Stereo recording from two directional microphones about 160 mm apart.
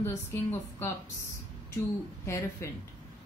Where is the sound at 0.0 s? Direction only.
15° left (ahead or behind).